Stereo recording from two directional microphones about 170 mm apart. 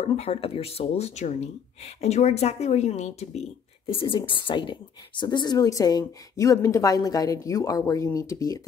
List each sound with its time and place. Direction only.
0.0 s speech: 40° left (ahead or behind); by 8.5 s 20° left (ahead or behind)